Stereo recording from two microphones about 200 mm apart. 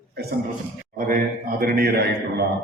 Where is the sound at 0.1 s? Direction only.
55° right (ahead or behind).